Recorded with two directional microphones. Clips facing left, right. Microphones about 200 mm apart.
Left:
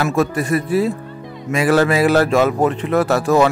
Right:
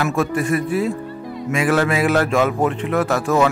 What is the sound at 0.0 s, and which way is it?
A man's voice, 40° left (ahead or behind).